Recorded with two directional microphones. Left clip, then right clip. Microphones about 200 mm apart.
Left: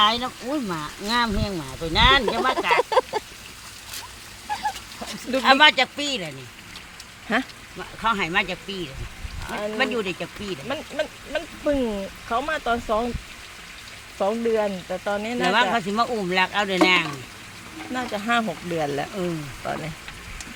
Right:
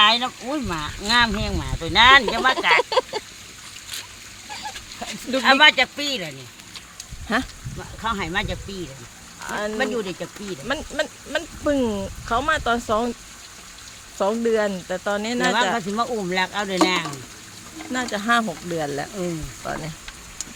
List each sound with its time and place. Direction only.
0.0 s speech: 15° left (ahead or behind)
4.5 s pig: 10° left (ahead or behind)
5.4 s speech: 5° left (ahead or behind)
10.7 s speech: 15° right (ahead or behind)
14.2 s speech: 15° right (ahead or behind)
15.7 s speech: centre (ahead or behind)
17.9 s speech: 10° right (ahead or behind)